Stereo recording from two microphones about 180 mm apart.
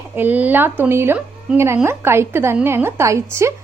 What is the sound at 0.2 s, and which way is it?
A woman's voice, 10° right (ahead or behind).